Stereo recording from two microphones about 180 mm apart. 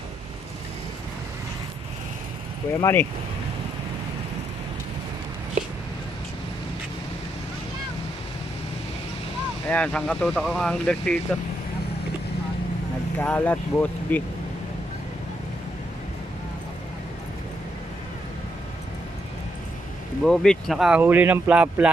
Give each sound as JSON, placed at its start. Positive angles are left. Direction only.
{"t": 2.8, "sound": "speech", "side_deg": 10}
{"t": 9.7, "sound": "speech", "side_deg": 5}
{"t": 13.2, "sound": "speech", "side_deg": 10}
{"t": 20.2, "sound": "speech", "side_deg": 0}